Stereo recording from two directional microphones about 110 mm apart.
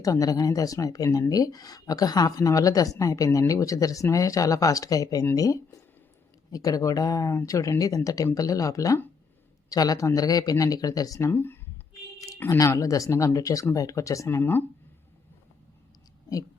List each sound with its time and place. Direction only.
0.0 s speech: 30° left (ahead or behind)
11.3 s speech: 20° left (ahead or behind)
12.5 s speech: 30° left (ahead or behind)